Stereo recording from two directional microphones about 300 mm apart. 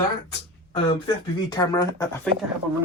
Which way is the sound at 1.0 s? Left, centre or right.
Centre.